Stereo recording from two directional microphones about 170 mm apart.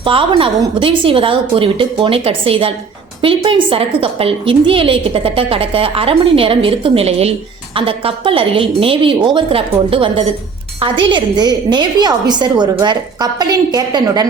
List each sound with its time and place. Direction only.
0.0 s a woman's voice: 30° right (ahead or behind)